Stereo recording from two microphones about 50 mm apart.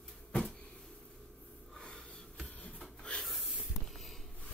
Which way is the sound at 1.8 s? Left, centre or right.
Centre.